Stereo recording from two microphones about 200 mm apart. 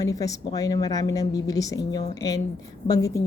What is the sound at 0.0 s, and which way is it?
A woman's voice, 15° left (ahead or behind).